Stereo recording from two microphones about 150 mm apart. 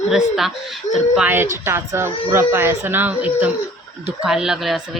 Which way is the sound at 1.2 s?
15° right (ahead or behind).